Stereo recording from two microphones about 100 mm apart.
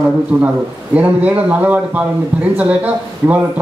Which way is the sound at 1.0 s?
15° right (ahead or behind).